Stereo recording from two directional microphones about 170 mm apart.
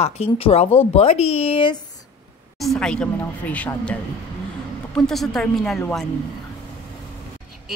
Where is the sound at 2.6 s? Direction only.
5° left (ahead or behind).